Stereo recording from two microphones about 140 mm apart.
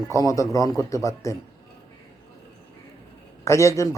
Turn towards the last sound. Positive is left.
turn(degrees=25)  # may be behind; listen again after turning